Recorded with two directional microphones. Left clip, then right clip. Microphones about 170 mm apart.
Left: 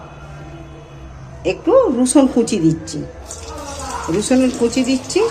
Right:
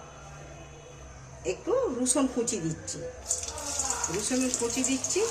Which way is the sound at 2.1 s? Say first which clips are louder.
Left 14 dB; 55° left (ahead or behind).